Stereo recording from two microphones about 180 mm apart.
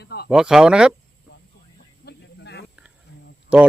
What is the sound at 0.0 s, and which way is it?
Speech, 65° left (ahead or behind).